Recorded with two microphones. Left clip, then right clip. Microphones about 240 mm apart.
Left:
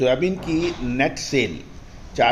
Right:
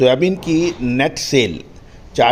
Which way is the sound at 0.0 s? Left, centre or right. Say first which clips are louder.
Right 6 dB; right.